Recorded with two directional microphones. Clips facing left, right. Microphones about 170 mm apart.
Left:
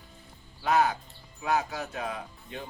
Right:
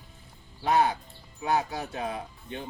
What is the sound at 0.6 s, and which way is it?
Speech, 35° right (ahead or behind).